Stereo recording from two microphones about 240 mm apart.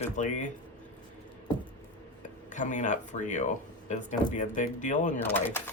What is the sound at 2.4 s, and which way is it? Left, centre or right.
Speech, left.